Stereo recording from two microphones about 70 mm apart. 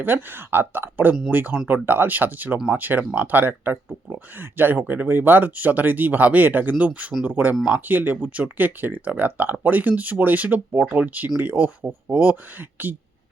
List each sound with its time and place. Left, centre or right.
0.0 s speech: right